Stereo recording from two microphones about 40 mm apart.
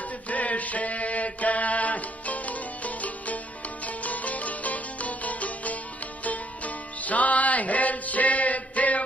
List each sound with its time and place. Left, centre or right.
0.3 s mantra: left
3.8 s music: left